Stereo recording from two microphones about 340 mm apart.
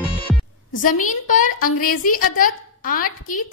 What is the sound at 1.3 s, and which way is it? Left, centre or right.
A woman's voice, left.